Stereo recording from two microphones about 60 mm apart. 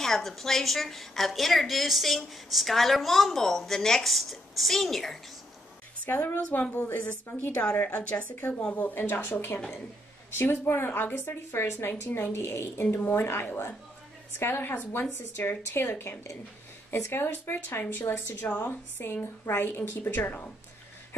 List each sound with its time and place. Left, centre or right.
0.0 s a woman's voice: centre
6.0 s speech: left
8.7 s speech: left
12.9 s speech: left